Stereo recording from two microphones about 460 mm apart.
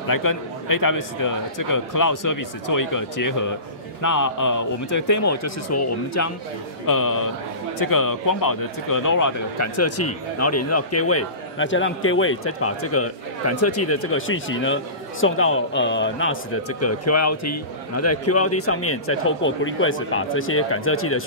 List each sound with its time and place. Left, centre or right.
0.1 s speech: left